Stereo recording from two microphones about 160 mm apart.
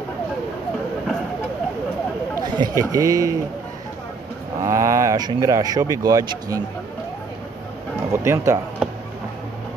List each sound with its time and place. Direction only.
2.3 s a man's voice: 20° right (ahead or behind)
4.6 s speech: 20° right (ahead or behind)
8.1 s speech: 15° right (ahead or behind)